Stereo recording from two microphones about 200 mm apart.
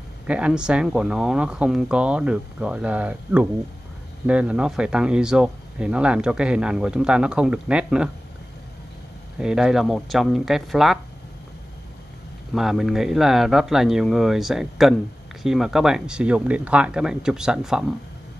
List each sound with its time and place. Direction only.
0.3 s speech: 5° right (ahead or behind)
9.4 s speech: 5° right (ahead or behind)
12.5 s speech: centre (ahead or behind)